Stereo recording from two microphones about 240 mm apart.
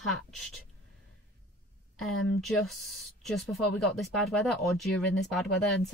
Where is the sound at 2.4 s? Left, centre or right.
Centre.